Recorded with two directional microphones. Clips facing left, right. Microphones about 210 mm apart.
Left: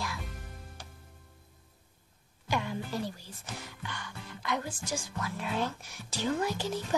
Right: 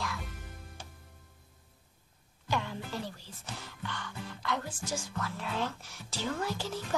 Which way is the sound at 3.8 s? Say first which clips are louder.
Right 2 dB; 15° left (ahead or behind).